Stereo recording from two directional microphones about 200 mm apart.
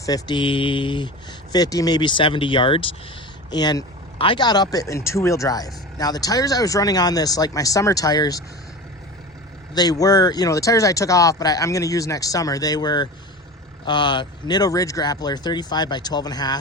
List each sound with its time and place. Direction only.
0.0 s speech: 20° left (ahead or behind)
9.7 s speech: 20° left (ahead or behind)